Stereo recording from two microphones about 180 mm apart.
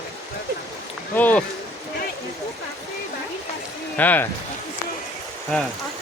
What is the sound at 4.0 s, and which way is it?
Speech, 10° left (ahead or behind).